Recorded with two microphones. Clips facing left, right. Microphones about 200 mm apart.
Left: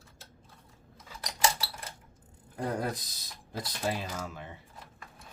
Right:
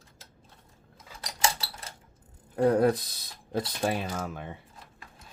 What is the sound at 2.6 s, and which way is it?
Speech, 60° right (ahead or behind).